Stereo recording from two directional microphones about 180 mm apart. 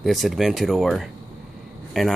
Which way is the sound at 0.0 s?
Centre (ahead or behind).